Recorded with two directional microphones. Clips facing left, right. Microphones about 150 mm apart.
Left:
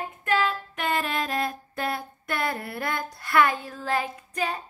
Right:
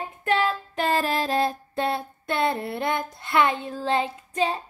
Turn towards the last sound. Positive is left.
turn(degrees=-25)  # may be behind; listen again after turning